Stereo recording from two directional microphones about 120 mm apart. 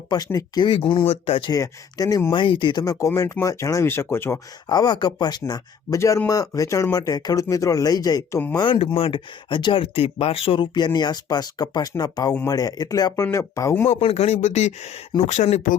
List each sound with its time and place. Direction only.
0.3 s speech: 30° left (ahead or behind)
1.1 s speech: 55° left (ahead or behind)
1.5 s speech: 30° left (ahead or behind)
2.3 s speech: 45° left (ahead or behind)
2.8 s speech: 25° left (ahead or behind)
4.7 s speech: 35° left (ahead or behind)
8.5 s speech: 45° left (ahead or behind); by 13.8 s 25° left (ahead or behind)
13.8 s speech: 60° left (ahead or behind); by 15.8 s 80° left